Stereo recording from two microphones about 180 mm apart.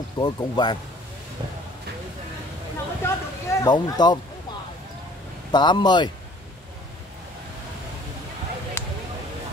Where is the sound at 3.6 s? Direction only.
25° left (ahead or behind).